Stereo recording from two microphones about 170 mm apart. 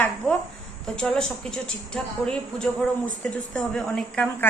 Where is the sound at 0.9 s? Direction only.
5° left (ahead or behind).